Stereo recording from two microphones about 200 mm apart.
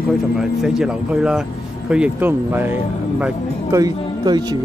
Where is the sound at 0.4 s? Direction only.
5° right (ahead or behind).